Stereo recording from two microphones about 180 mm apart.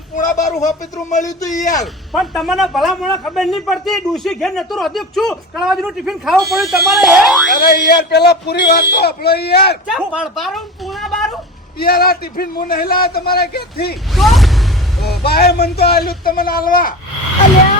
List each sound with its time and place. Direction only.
0.2 s a sound: 40° left (ahead or behind)
1.1 s speech: 45° left (ahead or behind)
1.8 s a man's voice: centre (ahead or behind)
7.5 s a man's voice: 60° left (ahead or behind)
9.8 s a woman's voice: 5° right (ahead or behind)
11.8 s a man's voice: 60° left (ahead or behind)
14.2 s music: centre (ahead or behind)
15.3 s a man's voice: 60° left (ahead or behind)